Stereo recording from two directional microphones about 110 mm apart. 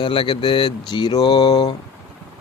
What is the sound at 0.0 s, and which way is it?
Mantra, 50° left (ahead or behind).